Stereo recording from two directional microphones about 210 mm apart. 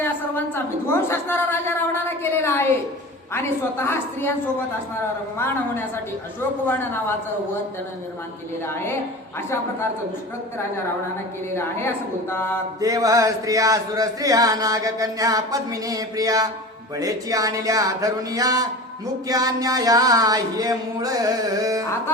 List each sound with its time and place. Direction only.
0.0 s a sound: 10° left (ahead or behind)
3.3 s a woman's voice: 10° left (ahead or behind)
6.7 s a woman's voice: 10° left (ahead or behind)
8.6 s a woman's voice: 10° left (ahead or behind)
11.5 s a woman's voice: 10° left (ahead or behind)
12.8 s speech: 15° right (ahead or behind)